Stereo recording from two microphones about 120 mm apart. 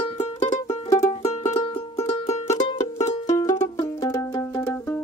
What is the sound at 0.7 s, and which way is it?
Music, 25° left (ahead or behind).